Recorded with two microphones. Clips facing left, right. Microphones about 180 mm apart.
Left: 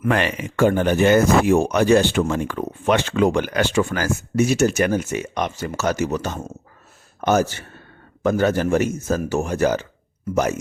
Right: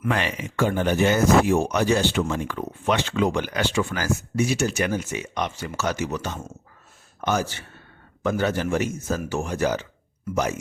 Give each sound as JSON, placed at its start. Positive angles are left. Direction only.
{"t": 0.0, "sound": "a man's voice", "side_deg": 55}